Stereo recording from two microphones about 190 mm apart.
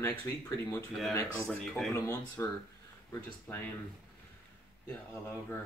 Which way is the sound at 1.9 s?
15° left (ahead or behind).